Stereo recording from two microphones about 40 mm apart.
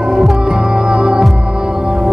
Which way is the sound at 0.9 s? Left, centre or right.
Centre.